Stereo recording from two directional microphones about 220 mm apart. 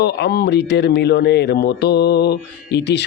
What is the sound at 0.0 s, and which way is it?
Speech, 50° left (ahead or behind).